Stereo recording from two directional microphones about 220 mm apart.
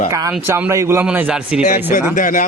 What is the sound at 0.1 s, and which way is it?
A man's voice, 15° right (ahead or behind).